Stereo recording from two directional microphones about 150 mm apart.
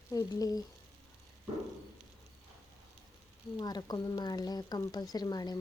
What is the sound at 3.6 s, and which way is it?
Speech, 25° left (ahead or behind).